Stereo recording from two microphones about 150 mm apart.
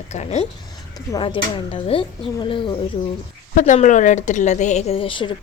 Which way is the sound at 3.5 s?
55° left (ahead or behind).